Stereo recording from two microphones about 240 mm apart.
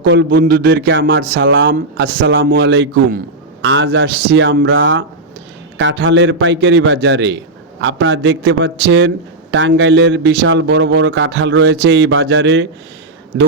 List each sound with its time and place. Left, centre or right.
0.0 s a man's voice: right